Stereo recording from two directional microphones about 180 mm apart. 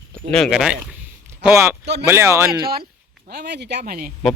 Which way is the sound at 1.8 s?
70° right (ahead or behind).